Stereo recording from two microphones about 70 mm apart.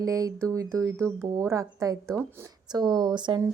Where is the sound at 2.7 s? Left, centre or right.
Right.